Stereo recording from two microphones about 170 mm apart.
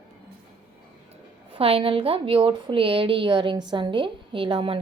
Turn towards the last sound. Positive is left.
turn(degrees=-30)  # may be behind; listen again after turning